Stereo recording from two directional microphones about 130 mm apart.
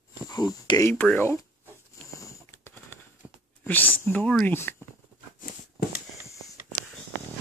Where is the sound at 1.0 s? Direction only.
10° left (ahead or behind).